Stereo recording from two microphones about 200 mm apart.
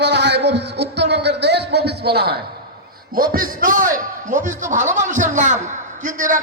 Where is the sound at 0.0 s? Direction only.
60° right (ahead or behind).